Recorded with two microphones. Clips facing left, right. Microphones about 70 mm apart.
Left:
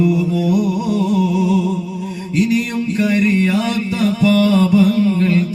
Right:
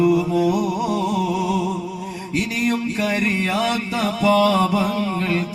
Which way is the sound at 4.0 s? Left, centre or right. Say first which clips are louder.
Left 4 dB; right.